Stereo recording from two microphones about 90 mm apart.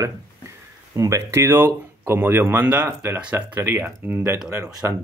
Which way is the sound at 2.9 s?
30° right (ahead or behind).